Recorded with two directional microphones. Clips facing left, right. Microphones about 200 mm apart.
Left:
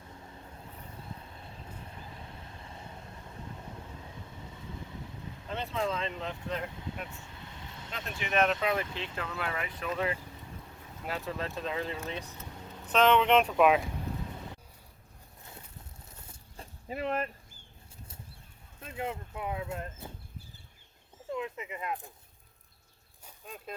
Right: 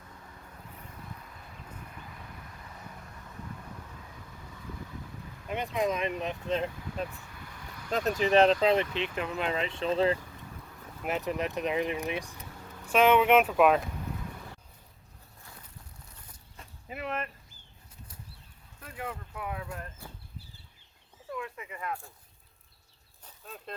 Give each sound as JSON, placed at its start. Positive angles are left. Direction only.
{"t": 0.0, "sound": "vehicle", "side_deg": 25}
{"t": 5.5, "sound": "speech", "side_deg": -15}
{"t": 6.7, "sound": "vehicle", "side_deg": 25}
{"t": 7.9, "sound": "speech", "side_deg": -40}
{"t": 11.0, "sound": "speech", "side_deg": -20}
{"t": 16.1, "sound": "zipper", "side_deg": 25}
{"t": 18.8, "sound": "speech", "side_deg": 25}
{"t": 21.2, "sound": "a sound", "side_deg": 20}
{"t": 23.2, "sound": "a sound", "side_deg": 10}